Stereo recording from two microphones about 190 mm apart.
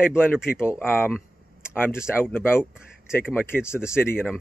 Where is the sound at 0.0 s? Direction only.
10° left (ahead or behind).